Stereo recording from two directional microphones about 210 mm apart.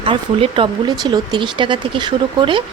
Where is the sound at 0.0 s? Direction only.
25° right (ahead or behind).